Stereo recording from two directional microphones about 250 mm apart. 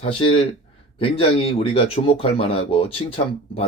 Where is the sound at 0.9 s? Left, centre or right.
Left.